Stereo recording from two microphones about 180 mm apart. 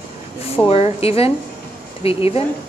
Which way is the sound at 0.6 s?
35° left (ahead or behind).